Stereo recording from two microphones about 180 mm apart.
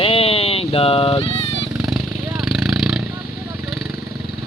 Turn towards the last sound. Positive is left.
turn(degrees=0)  # may be behind; listen again after turning